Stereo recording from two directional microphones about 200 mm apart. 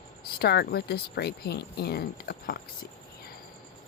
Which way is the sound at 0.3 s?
50° left (ahead or behind).